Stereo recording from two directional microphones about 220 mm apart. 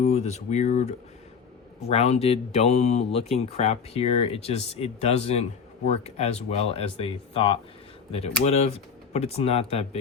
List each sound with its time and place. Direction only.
0.0 s speech: 30° left (ahead or behind)